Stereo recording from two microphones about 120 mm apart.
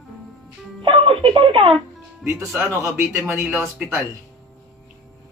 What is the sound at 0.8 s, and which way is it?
Speech, 50° right (ahead or behind).